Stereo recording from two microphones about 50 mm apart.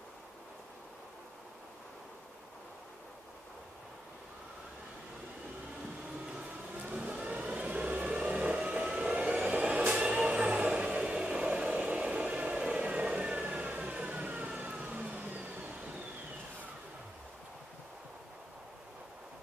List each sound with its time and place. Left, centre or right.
7.0 s vehicle: right